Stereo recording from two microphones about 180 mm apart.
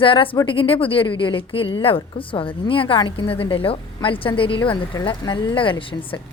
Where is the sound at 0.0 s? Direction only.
30° left (ahead or behind).